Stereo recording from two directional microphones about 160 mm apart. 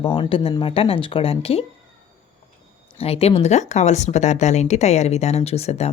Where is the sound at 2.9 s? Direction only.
40° left (ahead or behind).